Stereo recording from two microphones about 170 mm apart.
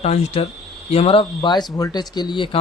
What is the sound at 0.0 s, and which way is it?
Speech, 40° left (ahead or behind).